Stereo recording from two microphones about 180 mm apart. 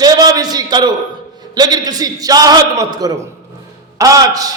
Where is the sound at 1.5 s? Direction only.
20° right (ahead or behind).